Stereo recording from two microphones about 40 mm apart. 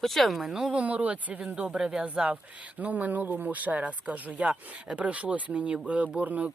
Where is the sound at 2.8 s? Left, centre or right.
Right.